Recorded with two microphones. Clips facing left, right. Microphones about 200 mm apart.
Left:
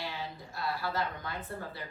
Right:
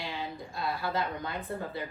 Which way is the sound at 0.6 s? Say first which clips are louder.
Right 2 dB; 20° right (ahead or behind).